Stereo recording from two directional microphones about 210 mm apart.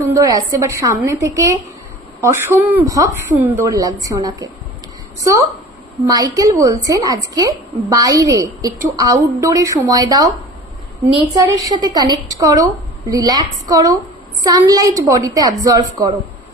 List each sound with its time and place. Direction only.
0.0 s a woman's voice: 15° right (ahead or behind)
6.0 s a woman's voice: 15° right (ahead or behind)